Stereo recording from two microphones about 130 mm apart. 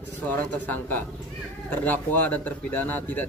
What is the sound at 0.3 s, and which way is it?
A man's voice, 15° left (ahead or behind).